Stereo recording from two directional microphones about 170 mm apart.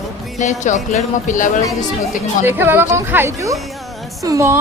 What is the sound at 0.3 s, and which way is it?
Speech, 45° left (ahead or behind).